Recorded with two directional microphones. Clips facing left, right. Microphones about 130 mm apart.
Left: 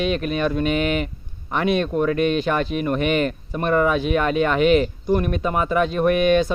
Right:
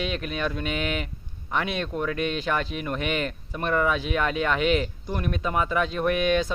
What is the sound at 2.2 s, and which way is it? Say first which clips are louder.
Speech: left 7 dB; 55° left (ahead or behind).